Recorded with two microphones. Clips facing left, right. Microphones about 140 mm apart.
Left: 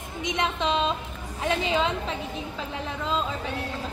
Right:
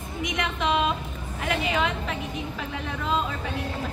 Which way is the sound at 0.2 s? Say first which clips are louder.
Left 1 dB; 25° left (ahead or behind).